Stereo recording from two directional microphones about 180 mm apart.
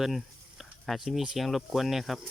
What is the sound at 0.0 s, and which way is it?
Speech, centre (ahead or behind).